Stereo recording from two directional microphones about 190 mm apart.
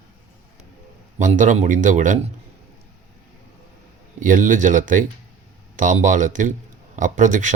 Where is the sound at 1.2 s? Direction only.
40° right (ahead or behind).